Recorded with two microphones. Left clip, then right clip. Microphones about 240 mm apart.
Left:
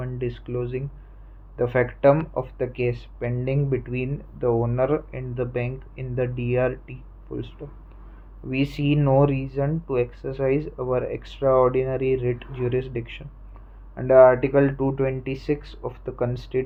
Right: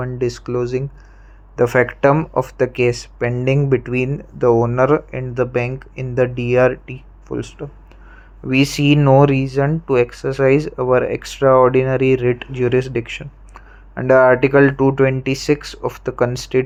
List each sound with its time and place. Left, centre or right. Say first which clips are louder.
0.0 s speech: right 9 dB; right